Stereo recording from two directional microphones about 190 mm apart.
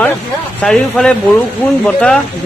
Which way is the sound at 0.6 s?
5° left (ahead or behind).